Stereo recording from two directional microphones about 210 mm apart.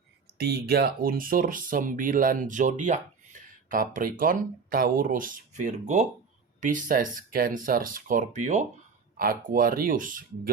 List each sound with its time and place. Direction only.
0.3 s speech: 50° right (ahead or behind)